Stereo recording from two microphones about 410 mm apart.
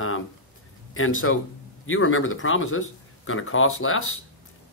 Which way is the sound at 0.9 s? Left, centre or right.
Left.